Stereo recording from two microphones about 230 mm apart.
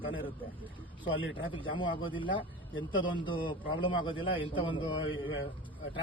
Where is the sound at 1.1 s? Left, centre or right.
Left.